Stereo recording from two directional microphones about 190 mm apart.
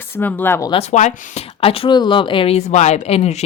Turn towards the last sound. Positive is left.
turn(degrees=35)  # may be behind; listen again after turning